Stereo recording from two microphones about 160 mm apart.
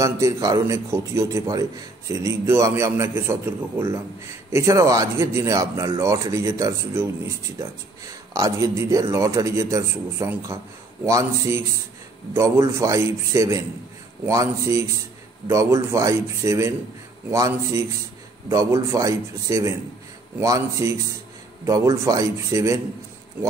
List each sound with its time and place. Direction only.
0.0 s a man's voice: 20° right (ahead or behind)